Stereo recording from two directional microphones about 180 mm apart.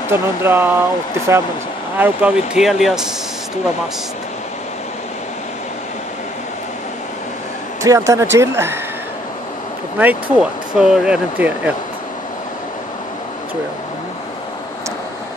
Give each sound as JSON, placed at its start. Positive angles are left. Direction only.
{"t": 0.1, "sound": "speech", "side_deg": -15}
{"t": 2.0, "sound": "speech", "side_deg": -10}
{"t": 7.8, "sound": "speech", "side_deg": -20}
{"t": 9.9, "sound": "speech", "side_deg": -10}